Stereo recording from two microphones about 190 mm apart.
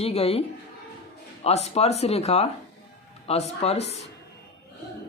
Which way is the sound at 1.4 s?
35° left (ahead or behind).